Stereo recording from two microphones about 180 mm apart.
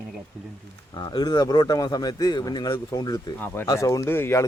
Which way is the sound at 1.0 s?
25° left (ahead or behind).